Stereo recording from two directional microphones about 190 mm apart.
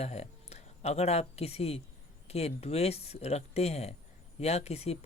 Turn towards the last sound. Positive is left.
turn(degrees=35)  # may be behind; listen again after turning